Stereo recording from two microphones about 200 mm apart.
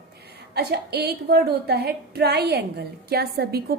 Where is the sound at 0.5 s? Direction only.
55° right (ahead or behind).